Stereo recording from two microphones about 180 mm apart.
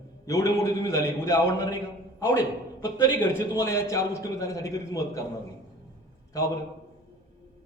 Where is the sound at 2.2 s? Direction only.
15° left (ahead or behind).